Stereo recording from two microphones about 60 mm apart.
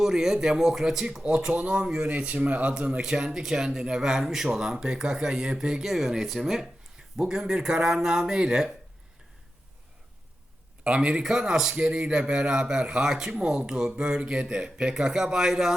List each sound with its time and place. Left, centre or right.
0.0 s a man's voice: centre; by 3.0 s right
3.0 s a man's voice: centre
10.8 s a man's voice: centre